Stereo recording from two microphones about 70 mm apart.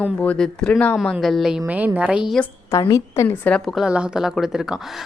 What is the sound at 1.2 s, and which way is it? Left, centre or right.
Speech, centre.